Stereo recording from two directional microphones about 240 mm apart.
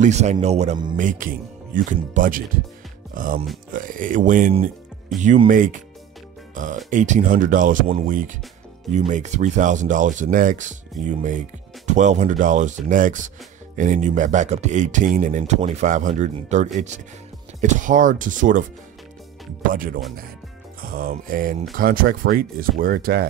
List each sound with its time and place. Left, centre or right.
0.0 s speech: right
0.9 s speech: right
19.7 s speech: right